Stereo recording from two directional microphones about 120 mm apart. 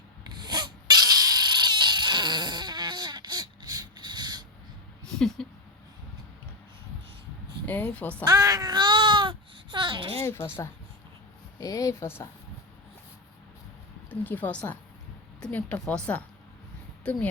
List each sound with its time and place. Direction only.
0.3 s dog: 35° right (ahead or behind)
5.4 s speech: 5° left (ahead or behind)
7.6 s a woman's voice: 15° left (ahead or behind)
8.2 s babbling: 35° right (ahead or behind)
10.2 s speech: 20° left (ahead or behind)
14.1 s speech: 15° left (ahead or behind)